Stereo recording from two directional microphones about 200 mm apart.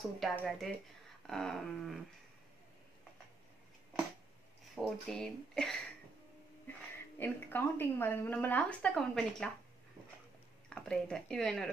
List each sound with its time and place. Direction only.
0.0 s speech: centre (ahead or behind)
4.8 s speech: centre (ahead or behind)
7.2 s a woman's voice: 10° left (ahead or behind)
10.7 s speech: 5° left (ahead or behind)